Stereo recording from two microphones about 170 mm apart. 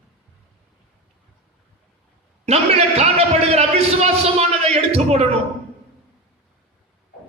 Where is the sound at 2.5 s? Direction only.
40° right (ahead or behind).